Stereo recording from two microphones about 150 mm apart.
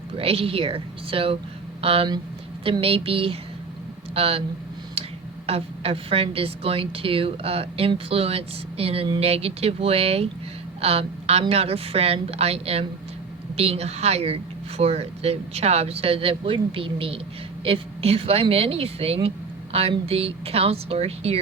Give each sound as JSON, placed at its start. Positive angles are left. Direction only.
{"t": 0.2, "sound": "a woman's voice", "side_deg": -40}
{"t": 5.5, "sound": "a woman's voice", "side_deg": -40}